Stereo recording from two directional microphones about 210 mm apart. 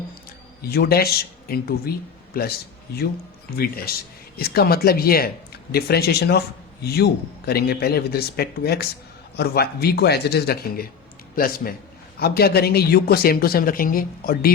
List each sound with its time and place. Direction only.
0.6 s a man's voice: 50° left (ahead or behind)
3.9 s speech: 45° left (ahead or behind)